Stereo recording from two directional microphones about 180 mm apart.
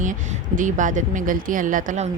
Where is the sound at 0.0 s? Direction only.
45° right (ahead or behind).